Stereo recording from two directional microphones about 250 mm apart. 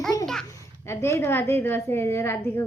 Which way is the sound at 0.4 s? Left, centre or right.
Centre.